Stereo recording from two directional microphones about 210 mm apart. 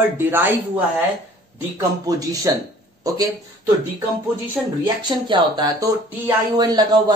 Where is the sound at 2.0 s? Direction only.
15° right (ahead or behind).